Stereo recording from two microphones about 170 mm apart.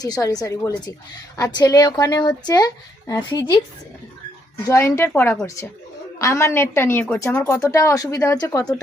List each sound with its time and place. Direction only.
0.0 s a woman's voice: 20° left (ahead or behind)
4.7 s a woman's voice: 15° left (ahead or behind)